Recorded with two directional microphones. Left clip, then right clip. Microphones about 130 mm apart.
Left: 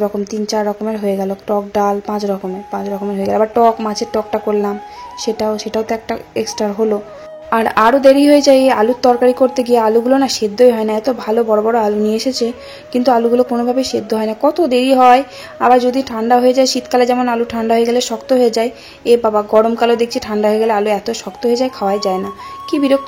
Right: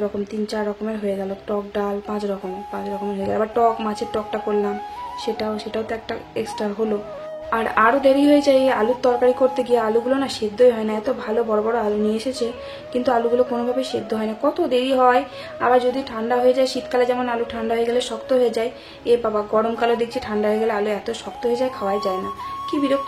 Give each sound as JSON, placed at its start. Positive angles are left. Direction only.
{"t": 0.5, "sound": "a woman's voice", "side_deg": 45}